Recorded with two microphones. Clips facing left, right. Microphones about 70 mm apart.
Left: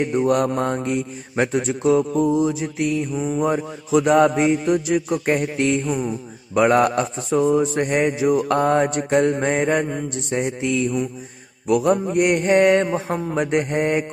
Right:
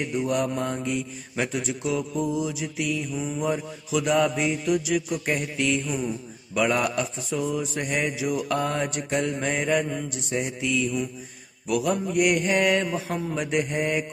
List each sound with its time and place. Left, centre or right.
0.0 s speech: left